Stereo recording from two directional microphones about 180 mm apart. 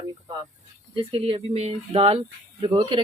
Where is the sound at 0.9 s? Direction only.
30° right (ahead or behind).